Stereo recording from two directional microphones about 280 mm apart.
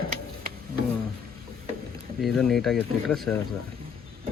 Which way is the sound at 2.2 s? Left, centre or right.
Centre.